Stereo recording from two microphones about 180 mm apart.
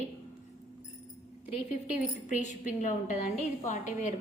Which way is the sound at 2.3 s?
40° left (ahead or behind).